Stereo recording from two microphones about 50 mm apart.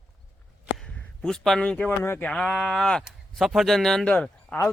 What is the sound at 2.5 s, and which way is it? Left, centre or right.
Speech, centre.